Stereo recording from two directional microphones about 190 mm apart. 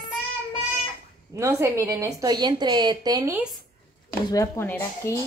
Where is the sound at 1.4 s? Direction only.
15° right (ahead or behind).